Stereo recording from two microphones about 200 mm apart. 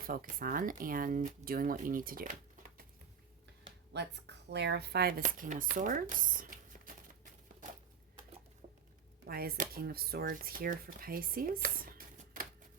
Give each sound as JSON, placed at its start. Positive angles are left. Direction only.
{"t": 0.1, "sound": "speech", "side_deg": -45}
{"t": 3.9, "sound": "speech", "side_deg": -60}
{"t": 9.2, "sound": "speech", "side_deg": -50}